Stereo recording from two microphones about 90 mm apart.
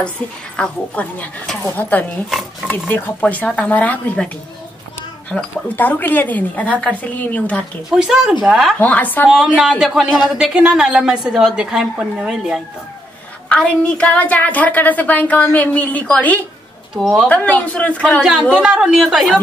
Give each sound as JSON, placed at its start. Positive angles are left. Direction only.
{"t": 0.6, "sound": "a woman's voice", "side_deg": 15}
{"t": 5.3, "sound": "a woman's voice", "side_deg": 20}
{"t": 7.9, "sound": "a woman's voice", "side_deg": -10}
{"t": 8.7, "sound": "speech", "side_deg": 20}
{"t": 9.6, "sound": "a woman's voice", "side_deg": -10}
{"t": 13.5, "sound": "a woman's voice", "side_deg": 15}
{"t": 16.9, "sound": "speech", "side_deg": -5}
{"t": 17.3, "sound": "a woman's voice", "side_deg": 15}
{"t": 18.7, "sound": "speech", "side_deg": -5}